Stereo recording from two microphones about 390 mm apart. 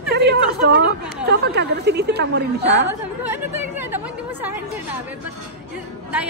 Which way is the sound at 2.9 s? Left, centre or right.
Centre.